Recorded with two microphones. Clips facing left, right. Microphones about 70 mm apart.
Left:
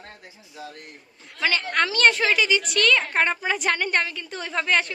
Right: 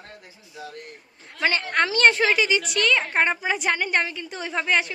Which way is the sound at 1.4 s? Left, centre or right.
Right.